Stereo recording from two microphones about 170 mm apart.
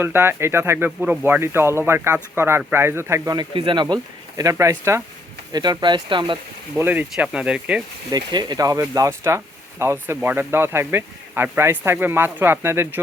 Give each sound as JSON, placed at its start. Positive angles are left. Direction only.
{"t": 0.0, "sound": "speech", "side_deg": -15}
{"t": 6.7, "sound": "speech", "side_deg": -10}
{"t": 8.1, "sound": "speech", "side_deg": -25}